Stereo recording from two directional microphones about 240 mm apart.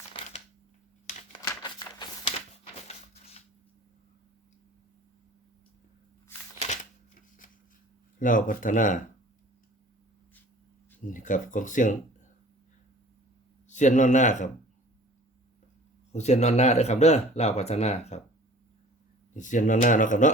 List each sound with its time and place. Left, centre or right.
0.1 s shuffling cards: left
1.3 s a sound: centre
6.6 s shuffling cards: left
8.2 s speech: left
11.1 s speech: left
13.7 s speech: left
16.1 s speech: left
19.4 s speech: left